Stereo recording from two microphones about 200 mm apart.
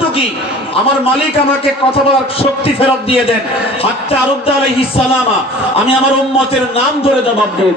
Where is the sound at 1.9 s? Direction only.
30° left (ahead or behind).